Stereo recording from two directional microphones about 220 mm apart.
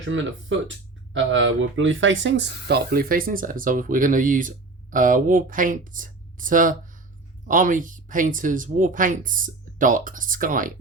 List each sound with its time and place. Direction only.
0.0 s speech: 60° right (ahead or behind); by 10.7 s 40° right (ahead or behind)